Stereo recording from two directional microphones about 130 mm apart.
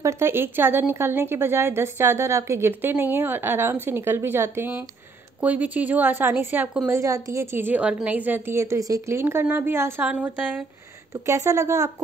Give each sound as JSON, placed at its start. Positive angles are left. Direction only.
{"t": 0.0, "sound": "a woman's voice", "side_deg": -20}
{"t": 6.9, "sound": "a woman's voice", "side_deg": -25}